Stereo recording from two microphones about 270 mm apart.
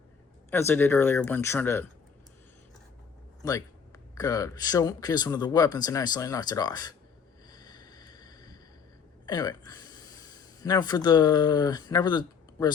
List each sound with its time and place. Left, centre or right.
0.5 s speech: centre
3.4 s speech: centre
7.5 s vehicle: centre
9.2 s speech: centre